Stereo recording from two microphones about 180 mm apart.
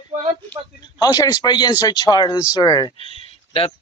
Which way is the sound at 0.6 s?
20° right (ahead or behind).